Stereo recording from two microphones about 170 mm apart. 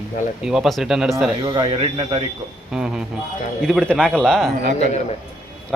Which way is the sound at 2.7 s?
5° right (ahead or behind).